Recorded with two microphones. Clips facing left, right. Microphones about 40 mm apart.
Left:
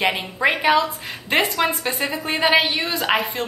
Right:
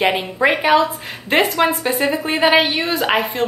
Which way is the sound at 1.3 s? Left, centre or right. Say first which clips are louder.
Right 4 dB; centre.